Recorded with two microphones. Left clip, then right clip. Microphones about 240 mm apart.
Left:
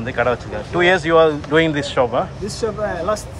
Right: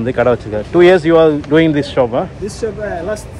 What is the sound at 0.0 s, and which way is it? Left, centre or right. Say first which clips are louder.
Speech: right 6 dB; centre.